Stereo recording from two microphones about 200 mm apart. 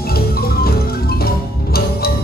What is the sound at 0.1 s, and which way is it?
Music, 50° left (ahead or behind).